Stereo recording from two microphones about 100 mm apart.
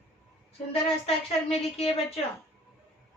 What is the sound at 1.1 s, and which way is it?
A woman's voice, 80° left.